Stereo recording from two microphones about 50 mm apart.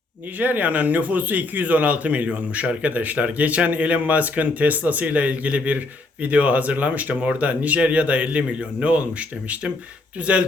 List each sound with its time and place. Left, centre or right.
0.3 s speech: right
10.2 s speech: right